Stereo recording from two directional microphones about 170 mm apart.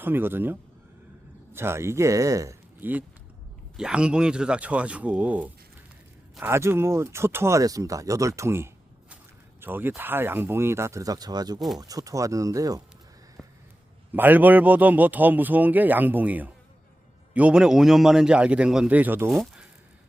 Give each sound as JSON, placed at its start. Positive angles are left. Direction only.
{"t": 0.0, "sound": "speech", "side_deg": -10}
{"t": 1.5, "sound": "speech", "side_deg": -15}
{"t": 8.4, "sound": "a sound", "side_deg": -15}
{"t": 9.6, "sound": "speech", "side_deg": -10}
{"t": 13.4, "sound": "a sound", "side_deg": 0}
{"t": 14.1, "sound": "a man's voice", "side_deg": -10}